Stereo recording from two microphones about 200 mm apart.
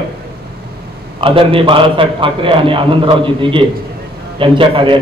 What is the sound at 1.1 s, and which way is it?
A man's voice, 25° right (ahead or behind).